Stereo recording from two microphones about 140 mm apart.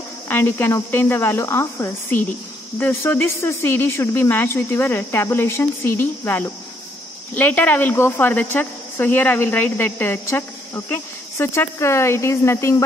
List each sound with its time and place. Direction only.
0.3 s speech: 15° left (ahead or behind)